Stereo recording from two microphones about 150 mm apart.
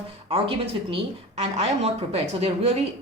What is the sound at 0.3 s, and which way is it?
Speech, 40° right (ahead or behind).